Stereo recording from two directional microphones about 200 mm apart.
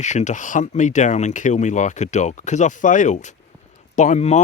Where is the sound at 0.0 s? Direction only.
35° left (ahead or behind).